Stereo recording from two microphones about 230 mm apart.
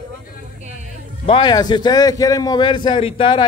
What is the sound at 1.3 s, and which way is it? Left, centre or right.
A man's voice, centre.